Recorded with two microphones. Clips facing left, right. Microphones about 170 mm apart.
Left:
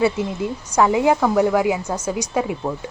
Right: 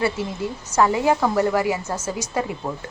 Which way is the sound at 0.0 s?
20° left (ahead or behind).